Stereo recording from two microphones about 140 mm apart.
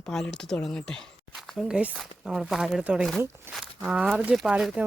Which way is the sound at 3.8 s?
5° right (ahead or behind).